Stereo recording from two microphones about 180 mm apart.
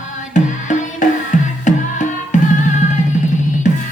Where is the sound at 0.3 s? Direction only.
45° left (ahead or behind).